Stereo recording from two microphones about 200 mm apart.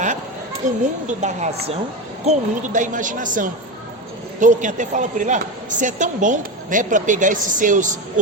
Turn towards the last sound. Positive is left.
turn(degrees=-40)  # may be behind; listen again after turning